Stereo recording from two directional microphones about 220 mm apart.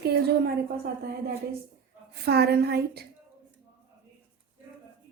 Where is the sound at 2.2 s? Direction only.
45° right (ahead or behind).